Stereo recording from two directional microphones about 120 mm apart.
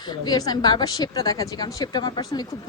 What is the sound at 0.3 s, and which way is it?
A woman's voice, 35° left (ahead or behind).